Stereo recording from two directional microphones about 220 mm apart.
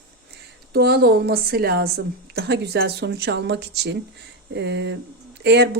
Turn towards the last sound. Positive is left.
turn(degrees=-50)  # may be behind; listen again after turning